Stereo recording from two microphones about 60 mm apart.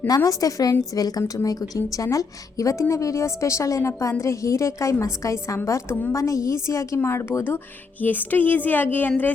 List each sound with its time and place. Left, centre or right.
0.3 s a woman's voice: left
5.9 s a woman's voice: left
6.1 s a woman's voice: left
8.0 s a woman's voice: left